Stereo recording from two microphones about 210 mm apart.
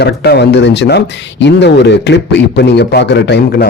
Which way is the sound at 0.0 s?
50° left (ahead or behind).